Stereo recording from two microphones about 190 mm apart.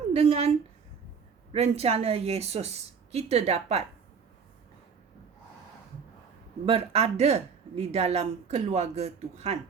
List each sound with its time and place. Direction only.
0.1 s speech: 30° right (ahead or behind)
1.5 s speech: 35° right (ahead or behind)
6.7 s speech: 30° right (ahead or behind)